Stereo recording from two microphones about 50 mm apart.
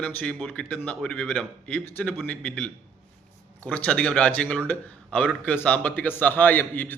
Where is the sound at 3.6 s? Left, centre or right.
Left.